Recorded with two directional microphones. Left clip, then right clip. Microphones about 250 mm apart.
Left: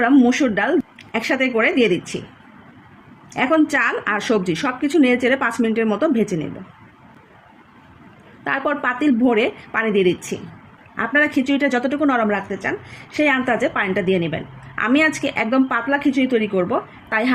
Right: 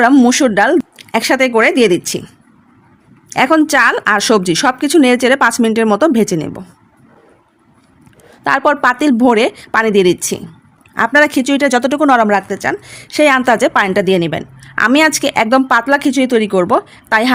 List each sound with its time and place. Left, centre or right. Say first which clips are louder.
0.0 s a woman's voice: right 6 dB; right
3.3 s a woman's voice: right 7 dB; right
8.4 s a woman's voice: right 9 dB; right